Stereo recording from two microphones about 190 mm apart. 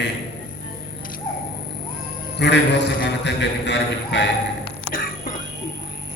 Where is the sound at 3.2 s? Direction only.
65° left (ahead or behind).